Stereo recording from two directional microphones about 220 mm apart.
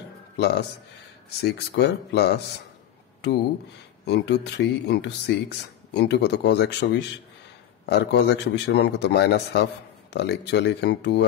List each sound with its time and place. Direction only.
0.4 s speech: 50° left (ahead or behind)
4.0 s speech: 50° left (ahead or behind)